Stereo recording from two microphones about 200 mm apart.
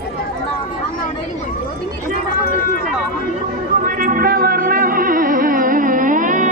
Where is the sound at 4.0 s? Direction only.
40° right (ahead or behind).